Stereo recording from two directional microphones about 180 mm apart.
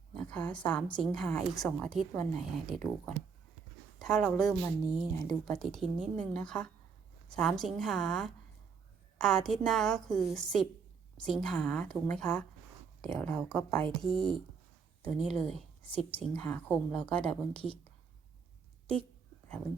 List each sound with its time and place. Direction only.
0.1 s a woman's voice: 5° left (ahead or behind)
4.0 s a woman's voice: 5° left (ahead or behind)